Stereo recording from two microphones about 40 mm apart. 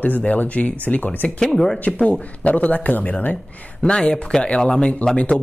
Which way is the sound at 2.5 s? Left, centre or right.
Left.